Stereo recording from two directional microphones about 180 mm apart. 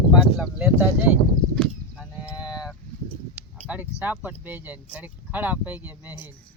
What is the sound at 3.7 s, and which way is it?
Speech, 5° right (ahead or behind).